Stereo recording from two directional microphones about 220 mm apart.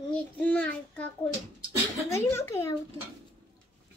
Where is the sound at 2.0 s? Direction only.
10° left (ahead or behind).